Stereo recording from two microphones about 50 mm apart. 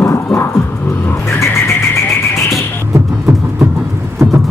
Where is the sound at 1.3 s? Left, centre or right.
Left.